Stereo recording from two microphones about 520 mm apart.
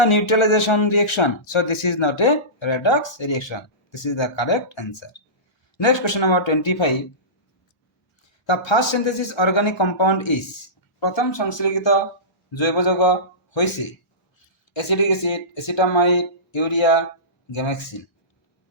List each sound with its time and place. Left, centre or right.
0.0 s speech: left
8.4 s speech: left